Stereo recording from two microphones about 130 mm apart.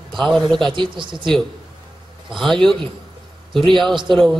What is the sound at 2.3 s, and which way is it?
Speech, 5° left (ahead or behind).